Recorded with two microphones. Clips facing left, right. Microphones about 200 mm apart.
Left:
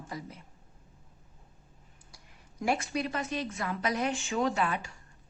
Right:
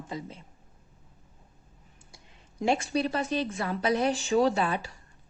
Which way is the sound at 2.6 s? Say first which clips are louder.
Right 4 dB; 25° right (ahead or behind).